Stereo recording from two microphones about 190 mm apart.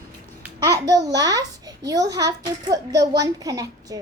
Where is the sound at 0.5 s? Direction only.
20° right (ahead or behind).